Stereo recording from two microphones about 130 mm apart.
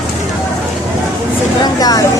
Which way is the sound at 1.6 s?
30° left (ahead or behind).